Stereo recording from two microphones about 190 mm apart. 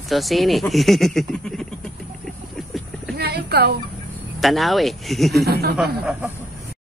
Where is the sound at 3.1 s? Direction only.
55° right (ahead or behind).